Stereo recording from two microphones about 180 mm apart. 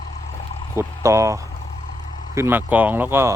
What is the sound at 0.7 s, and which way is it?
Speech, 15° right (ahead or behind).